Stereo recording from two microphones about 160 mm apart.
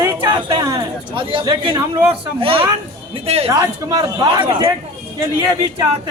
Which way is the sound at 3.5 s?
20° right (ahead or behind).